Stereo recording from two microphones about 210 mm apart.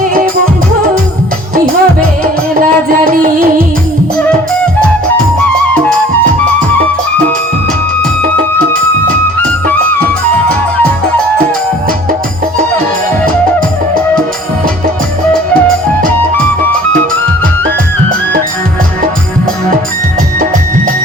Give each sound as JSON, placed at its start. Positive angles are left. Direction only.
{"t": 1.5, "sound": "music", "side_deg": -40}